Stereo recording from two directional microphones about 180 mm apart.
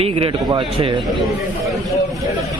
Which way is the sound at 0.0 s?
30° right (ahead or behind).